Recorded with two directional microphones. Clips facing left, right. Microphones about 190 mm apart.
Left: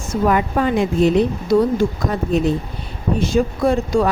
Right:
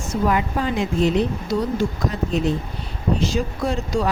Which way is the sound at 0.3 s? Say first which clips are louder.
Left 5 dB; 55° left (ahead or behind).